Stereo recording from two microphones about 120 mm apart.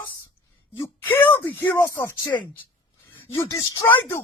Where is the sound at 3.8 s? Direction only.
15° left (ahead or behind).